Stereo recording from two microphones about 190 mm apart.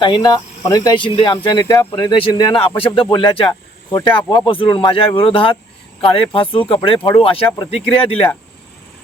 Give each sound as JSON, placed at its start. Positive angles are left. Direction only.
{"t": 0.0, "sound": "speech", "side_deg": 25}
{"t": 3.9, "sound": "speech", "side_deg": 10}
{"t": 4.3, "sound": "speech", "side_deg": 25}